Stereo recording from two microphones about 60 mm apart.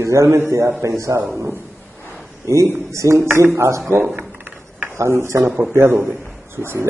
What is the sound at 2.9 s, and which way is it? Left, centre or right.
Speech, right.